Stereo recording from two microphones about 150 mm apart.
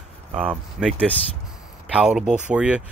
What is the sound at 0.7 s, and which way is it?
Speech, 5° right (ahead or behind).